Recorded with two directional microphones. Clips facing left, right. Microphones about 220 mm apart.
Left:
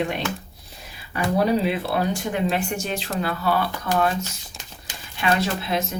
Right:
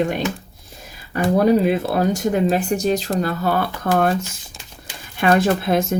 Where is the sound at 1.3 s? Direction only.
45° right (ahead or behind).